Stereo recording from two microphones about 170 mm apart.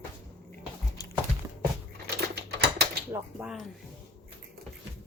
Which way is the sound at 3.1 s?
10° right (ahead or behind).